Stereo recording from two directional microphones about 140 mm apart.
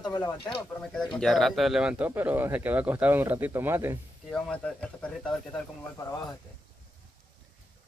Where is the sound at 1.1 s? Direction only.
Centre (ahead or behind); by 4.0 s 15° right (ahead or behind).